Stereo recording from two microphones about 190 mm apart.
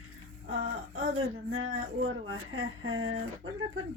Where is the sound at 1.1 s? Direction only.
90° right.